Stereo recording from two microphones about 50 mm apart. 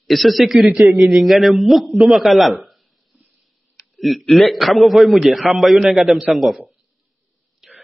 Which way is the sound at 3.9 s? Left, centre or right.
Centre.